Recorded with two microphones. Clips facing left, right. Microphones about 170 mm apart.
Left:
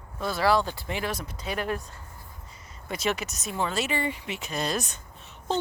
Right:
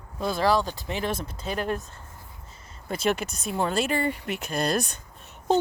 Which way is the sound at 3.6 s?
45° right (ahead or behind).